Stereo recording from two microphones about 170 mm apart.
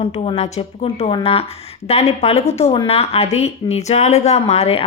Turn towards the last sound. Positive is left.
turn(degrees=35)  # may be behind; listen again after turning